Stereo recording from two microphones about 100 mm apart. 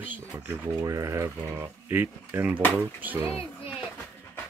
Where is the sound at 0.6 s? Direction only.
35° right (ahead or behind); by 3.2 s 20° right (ahead or behind).